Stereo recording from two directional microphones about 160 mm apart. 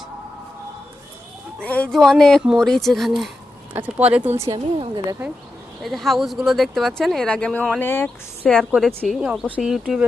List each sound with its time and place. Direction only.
1.6 s speech: 10° left (ahead or behind)
3.8 s speech: 10° right (ahead or behind)
4.4 s a woman's voice: 20° right (ahead or behind)
5.8 s speech: centre (ahead or behind)